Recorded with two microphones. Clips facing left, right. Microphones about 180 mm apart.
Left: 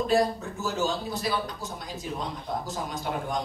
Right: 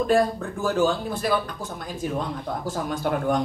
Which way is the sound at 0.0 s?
55° right (ahead or behind).